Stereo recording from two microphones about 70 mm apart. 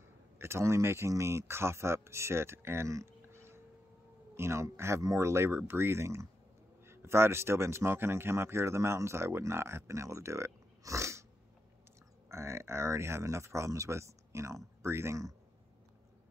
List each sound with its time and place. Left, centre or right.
0.4 s speech: right
12.3 s speech: right